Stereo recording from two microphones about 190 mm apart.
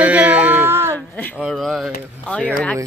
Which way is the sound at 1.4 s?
Centre (ahead or behind).